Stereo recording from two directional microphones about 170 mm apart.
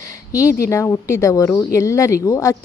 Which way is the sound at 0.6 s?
15° left (ahead or behind).